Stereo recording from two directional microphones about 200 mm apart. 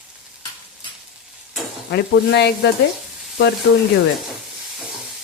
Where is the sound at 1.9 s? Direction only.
55° left (ahead or behind).